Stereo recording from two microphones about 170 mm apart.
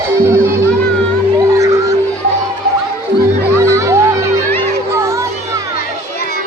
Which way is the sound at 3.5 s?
15° right (ahead or behind).